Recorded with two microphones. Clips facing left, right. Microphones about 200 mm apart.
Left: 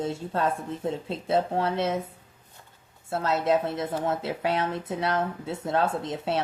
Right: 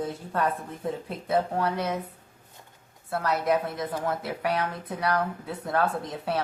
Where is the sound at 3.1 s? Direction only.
25° left (ahead or behind).